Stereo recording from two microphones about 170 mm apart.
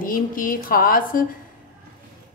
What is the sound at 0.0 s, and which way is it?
A woman's voice, 55° left (ahead or behind).